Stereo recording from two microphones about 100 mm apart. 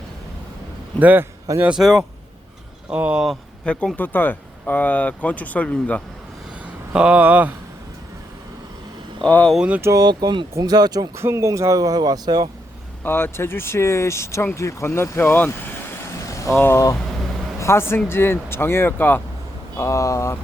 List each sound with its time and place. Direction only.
0.9 s a man's voice: 20° right (ahead or behind)
1.6 s speech: 5° right (ahead or behind)
3.2 s speech: 10° left (ahead or behind)
6.9 s speech: 10° right (ahead or behind)
9.2 s speech: 15° left (ahead or behind)
9.6 s speech: 15° right (ahead or behind)
9.8 s speech: 35° right (ahead or behind)
11.2 s speech: 25° right (ahead or behind)
13.1 s speech: 20° left (ahead or behind)
19.7 s speech: 30° left (ahead or behind)